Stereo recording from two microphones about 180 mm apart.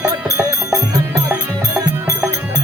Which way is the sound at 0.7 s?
20° right (ahead or behind).